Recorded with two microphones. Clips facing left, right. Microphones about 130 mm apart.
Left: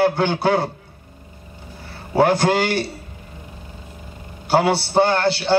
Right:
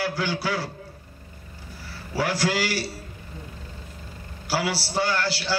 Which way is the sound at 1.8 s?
55° left (ahead or behind).